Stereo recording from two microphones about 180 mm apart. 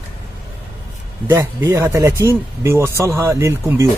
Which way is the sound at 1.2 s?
15° right (ahead or behind).